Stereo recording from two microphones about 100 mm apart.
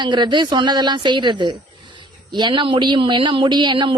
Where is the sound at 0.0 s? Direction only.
50° right (ahead or behind).